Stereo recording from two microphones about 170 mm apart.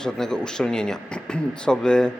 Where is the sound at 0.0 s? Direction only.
5° left (ahead or behind).